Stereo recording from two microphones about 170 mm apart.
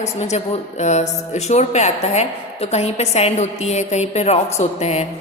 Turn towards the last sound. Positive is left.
turn(degrees=40)  # may be behind; listen again after turning